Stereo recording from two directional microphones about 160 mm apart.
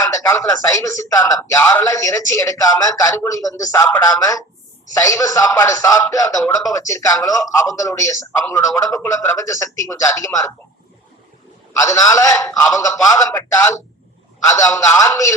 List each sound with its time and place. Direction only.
0.1 s a man's voice: 20° left (ahead or behind)
11.9 s a man's voice: 20° left (ahead or behind)